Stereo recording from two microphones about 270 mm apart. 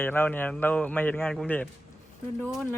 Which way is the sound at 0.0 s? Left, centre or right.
Centre.